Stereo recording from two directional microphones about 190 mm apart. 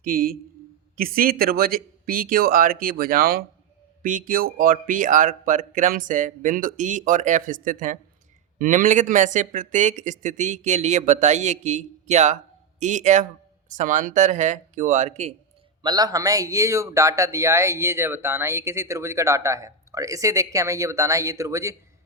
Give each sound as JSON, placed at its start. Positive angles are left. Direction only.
{"t": 0.0, "sound": "speech", "side_deg": -50}
{"t": 15.8, "sound": "a man's voice", "side_deg": -20}